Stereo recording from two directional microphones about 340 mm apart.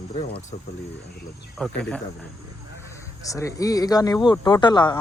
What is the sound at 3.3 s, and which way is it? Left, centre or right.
Speech, centre.